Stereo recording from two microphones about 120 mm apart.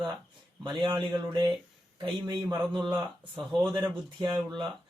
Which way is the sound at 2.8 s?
15° right (ahead or behind).